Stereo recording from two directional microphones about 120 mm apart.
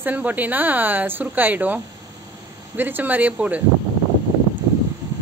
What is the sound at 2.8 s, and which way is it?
Speech, 15° right (ahead or behind).